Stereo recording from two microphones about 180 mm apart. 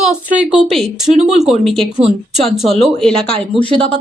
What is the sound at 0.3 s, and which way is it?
A woman's voice, 5° right (ahead or behind).